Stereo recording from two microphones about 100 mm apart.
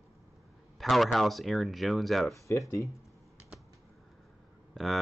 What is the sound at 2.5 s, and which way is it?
Speech, 30° left (ahead or behind).